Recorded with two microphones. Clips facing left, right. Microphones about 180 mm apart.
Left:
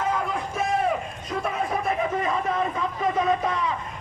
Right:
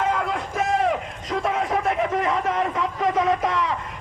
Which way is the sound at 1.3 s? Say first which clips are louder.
Right 4 dB; 90° right.